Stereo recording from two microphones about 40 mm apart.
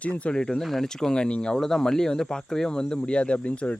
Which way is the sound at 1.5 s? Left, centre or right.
Centre.